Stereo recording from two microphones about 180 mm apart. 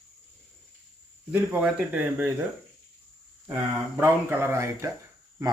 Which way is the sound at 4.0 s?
15° right (ahead or behind).